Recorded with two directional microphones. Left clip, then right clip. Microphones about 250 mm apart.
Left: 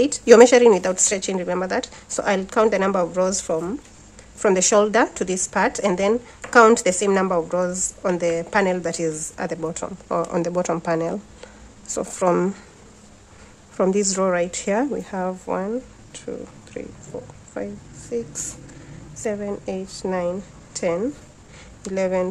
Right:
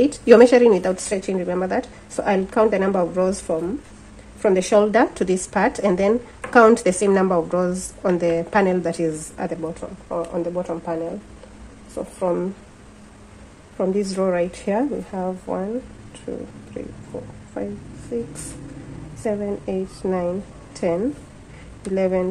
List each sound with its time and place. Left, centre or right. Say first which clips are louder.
0.0 s a woman's voice: even; centre
9.6 s speech: left 2 dB; left
13.7 s a woman's voice: left 2 dB; centre
17.6 s a woman's voice: right 1 dB; centre